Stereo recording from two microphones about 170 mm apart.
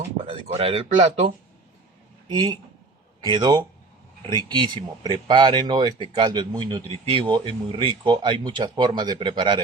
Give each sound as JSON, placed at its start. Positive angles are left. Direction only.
{"t": 0.3, "sound": "speech", "side_deg": -35}
{"t": 2.2, "sound": "a man's voice", "side_deg": -25}